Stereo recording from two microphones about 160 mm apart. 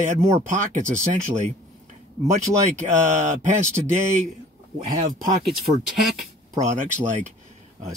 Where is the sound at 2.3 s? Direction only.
50° right (ahead or behind).